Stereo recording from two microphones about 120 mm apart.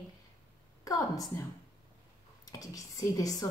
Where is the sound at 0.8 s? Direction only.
30° left (ahead or behind).